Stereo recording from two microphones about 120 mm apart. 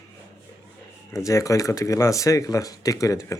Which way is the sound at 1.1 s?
25° left (ahead or behind).